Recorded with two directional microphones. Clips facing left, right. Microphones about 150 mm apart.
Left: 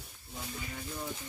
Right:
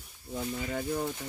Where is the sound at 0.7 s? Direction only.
65° right (ahead or behind).